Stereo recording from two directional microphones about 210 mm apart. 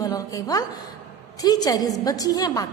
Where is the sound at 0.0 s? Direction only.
15° left (ahead or behind).